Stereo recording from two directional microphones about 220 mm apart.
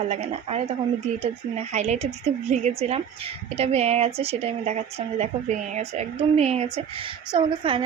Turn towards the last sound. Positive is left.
turn(degrees=-25)  # may be behind; listen again after turning